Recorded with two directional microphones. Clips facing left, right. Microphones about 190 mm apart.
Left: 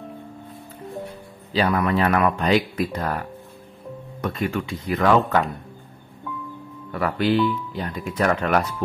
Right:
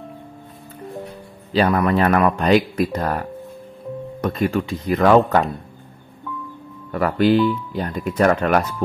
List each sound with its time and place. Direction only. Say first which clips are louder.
1.5 s speech: right 4 dB; 45° right (ahead or behind)
6.9 s speech: right 5 dB; 45° right (ahead or behind)